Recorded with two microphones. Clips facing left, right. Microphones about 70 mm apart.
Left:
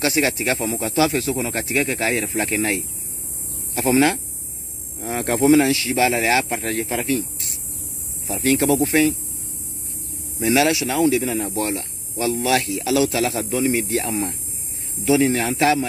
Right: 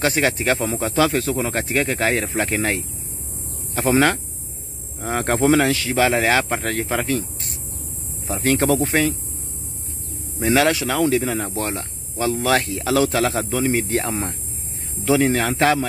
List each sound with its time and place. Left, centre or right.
0.0 s speech: right
10.4 s speech: right
15.3 s speech: right